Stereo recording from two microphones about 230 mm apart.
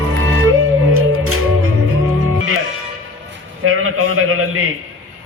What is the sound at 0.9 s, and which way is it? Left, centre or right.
Music, right.